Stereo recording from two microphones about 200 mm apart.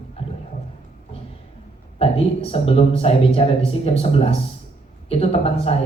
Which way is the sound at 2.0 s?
30° left (ahead or behind).